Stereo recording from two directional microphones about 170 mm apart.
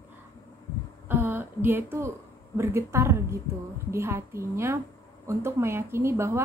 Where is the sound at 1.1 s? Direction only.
10° right (ahead or behind).